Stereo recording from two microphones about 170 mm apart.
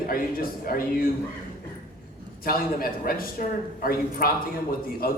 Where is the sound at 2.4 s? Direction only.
60° left (ahead or behind).